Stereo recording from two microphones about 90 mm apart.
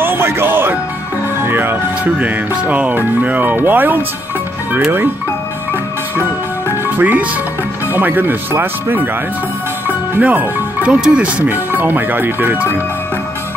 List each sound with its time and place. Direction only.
0.0 s music: 25° right (ahead or behind)
1.4 s speech: 25° right (ahead or behind)
6.7 s music: 20° right (ahead or behind)
7.9 s speech: 20° right (ahead or behind)